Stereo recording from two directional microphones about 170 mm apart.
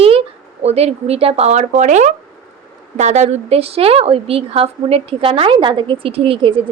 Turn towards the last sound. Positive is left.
turn(degrees=-30)  # may be behind; listen again after turning